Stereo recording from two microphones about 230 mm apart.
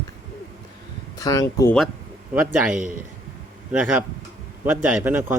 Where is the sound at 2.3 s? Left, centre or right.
Centre.